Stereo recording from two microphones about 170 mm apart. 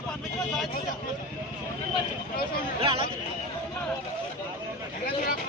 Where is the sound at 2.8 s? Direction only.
30° right (ahead or behind).